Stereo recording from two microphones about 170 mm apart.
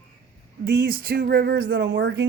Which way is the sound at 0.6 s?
65° right (ahead or behind).